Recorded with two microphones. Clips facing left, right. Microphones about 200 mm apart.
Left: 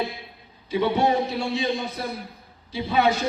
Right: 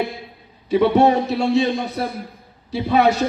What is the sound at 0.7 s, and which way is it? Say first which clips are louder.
A man's voice: right 7 dB; 65° right (ahead or behind).